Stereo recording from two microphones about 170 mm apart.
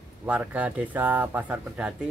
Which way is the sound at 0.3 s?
10° right (ahead or behind).